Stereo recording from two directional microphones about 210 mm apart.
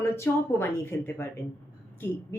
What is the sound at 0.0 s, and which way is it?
A woman's voice, 10° left (ahead or behind).